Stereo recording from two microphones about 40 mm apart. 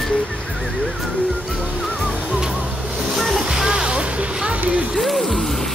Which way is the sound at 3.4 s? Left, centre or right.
Right.